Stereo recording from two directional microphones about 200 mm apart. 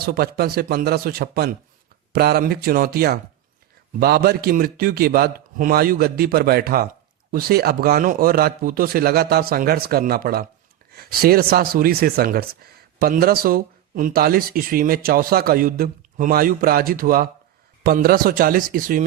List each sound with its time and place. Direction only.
0.0 s speech: 50° right (ahead or behind)